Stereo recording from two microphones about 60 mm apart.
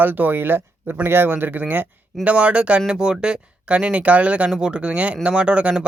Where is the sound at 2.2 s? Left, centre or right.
Right.